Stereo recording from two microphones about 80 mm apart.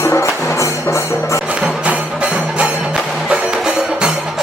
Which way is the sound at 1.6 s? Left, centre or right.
Centre.